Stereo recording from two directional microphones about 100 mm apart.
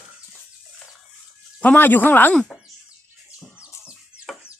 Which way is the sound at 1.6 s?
20° left (ahead or behind).